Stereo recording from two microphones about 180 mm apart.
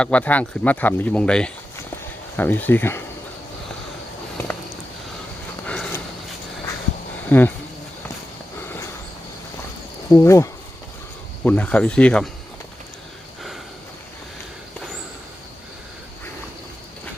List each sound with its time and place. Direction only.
0.0 s speech: 10° left (ahead or behind)
5.6 s horse: 5° left (ahead or behind)
7.3 s speech: 10° left (ahead or behind)
10.1 s speech: 15° left (ahead or behind)